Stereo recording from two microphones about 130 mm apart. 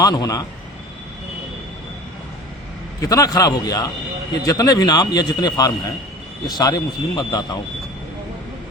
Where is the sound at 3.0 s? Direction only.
25° left (ahead or behind).